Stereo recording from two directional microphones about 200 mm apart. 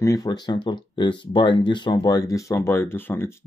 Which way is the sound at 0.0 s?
20° left (ahead or behind).